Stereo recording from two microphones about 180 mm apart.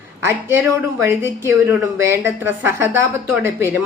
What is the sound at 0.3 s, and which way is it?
A woman's voice, 15° right (ahead or behind).